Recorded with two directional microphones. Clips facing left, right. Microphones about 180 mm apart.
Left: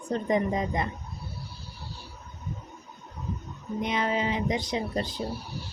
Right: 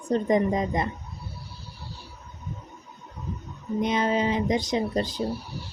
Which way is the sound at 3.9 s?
40° right (ahead or behind).